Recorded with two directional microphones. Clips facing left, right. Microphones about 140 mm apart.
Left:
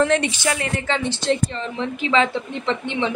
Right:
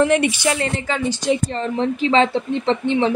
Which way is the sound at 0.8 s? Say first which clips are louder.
Even; 5° right (ahead or behind).